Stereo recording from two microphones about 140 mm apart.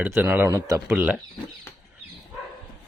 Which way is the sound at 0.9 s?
5° right (ahead or behind).